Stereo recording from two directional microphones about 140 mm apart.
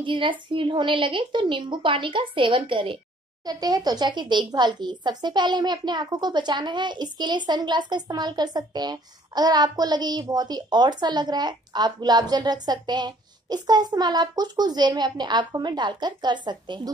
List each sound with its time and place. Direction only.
0.0 s speech: 35° right (ahead or behind)